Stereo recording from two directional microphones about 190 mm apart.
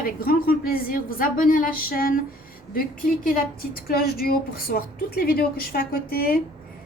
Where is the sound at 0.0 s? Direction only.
50° left (ahead or behind).